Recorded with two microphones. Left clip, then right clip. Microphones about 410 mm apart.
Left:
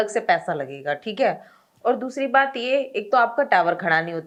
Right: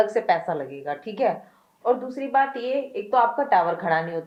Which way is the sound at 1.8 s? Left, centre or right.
Left.